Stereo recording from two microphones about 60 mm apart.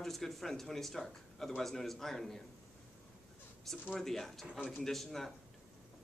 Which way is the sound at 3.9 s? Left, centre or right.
Centre.